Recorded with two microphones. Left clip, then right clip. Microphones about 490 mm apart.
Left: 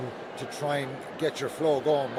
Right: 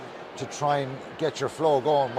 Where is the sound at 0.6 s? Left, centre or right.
Right.